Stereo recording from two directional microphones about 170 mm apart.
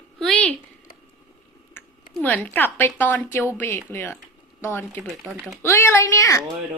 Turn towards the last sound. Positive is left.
turn(degrees=20)  # may be behind; listen again after turning